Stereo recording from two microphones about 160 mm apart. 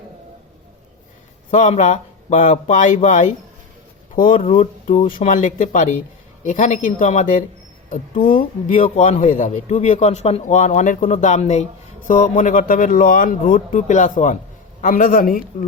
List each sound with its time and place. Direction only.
1.5 s a man's voice: 50° left (ahead or behind)